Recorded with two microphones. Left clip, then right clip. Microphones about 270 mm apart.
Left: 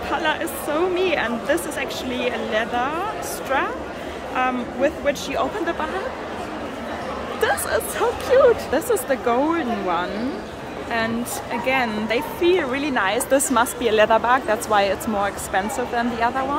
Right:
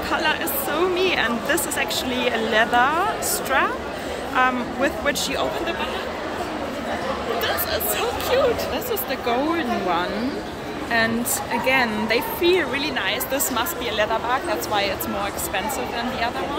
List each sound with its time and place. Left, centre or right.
0.1 s a woman's voice: centre
7.4 s a woman's voice: centre
11.6 s speech: centre